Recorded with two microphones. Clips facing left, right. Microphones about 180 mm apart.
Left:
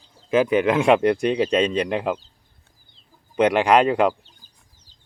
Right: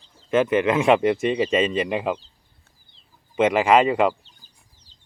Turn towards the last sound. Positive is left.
turn(degrees=0)  # may be behind; listen again after turning